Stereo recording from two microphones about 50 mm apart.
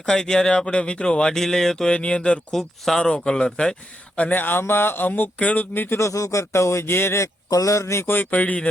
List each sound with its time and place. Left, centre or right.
0.0 s speech: centre
1.9 s speech: left
2.6 s speech: centre
3.0 s speech: centre
4.2 s speech: left
5.4 s speech: left
5.7 s speech: left
6.0 s speech: left
7.7 s speech: left
8.0 s speech: left